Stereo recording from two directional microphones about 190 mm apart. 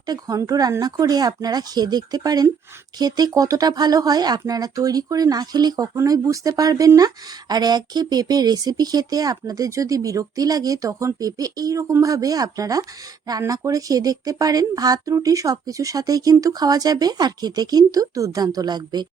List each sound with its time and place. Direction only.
0.1 s speech: 20° right (ahead or behind)